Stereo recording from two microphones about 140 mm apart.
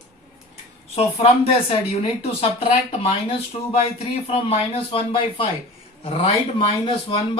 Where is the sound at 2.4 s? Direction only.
45° left (ahead or behind).